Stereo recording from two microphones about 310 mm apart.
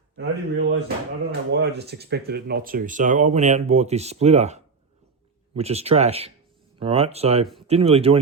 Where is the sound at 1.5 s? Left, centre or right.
Right.